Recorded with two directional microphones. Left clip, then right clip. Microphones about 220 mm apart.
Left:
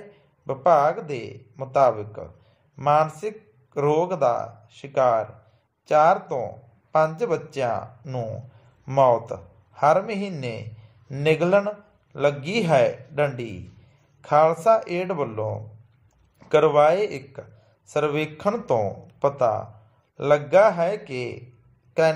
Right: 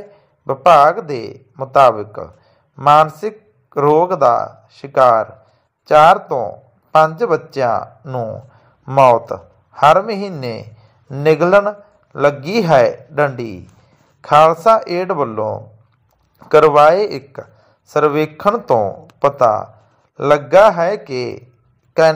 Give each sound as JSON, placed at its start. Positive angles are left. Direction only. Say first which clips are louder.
{"t": 0.5, "sound": "a man's voice", "louder": "right 9 dB", "side_deg": -20}